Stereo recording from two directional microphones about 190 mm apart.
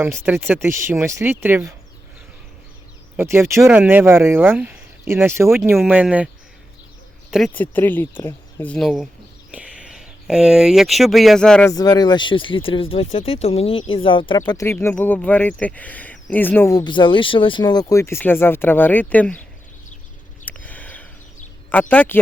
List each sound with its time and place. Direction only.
0.0 s speech: 10° right (ahead or behind)
3.2 s speech: 15° right (ahead or behind)
7.3 s speech: centre (ahead or behind)
11.7 s speech: 20° left (ahead or behind)
20.4 s a sound: 10° left (ahead or behind)
21.7 s speech: 10° left (ahead or behind)